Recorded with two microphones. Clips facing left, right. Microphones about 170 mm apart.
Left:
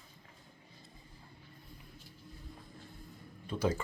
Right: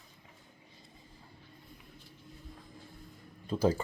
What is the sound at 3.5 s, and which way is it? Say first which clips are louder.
Speech: right 4 dB; 30° right (ahead or behind).